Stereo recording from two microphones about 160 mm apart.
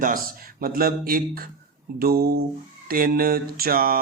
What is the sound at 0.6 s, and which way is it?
Speech, 70° right (ahead or behind).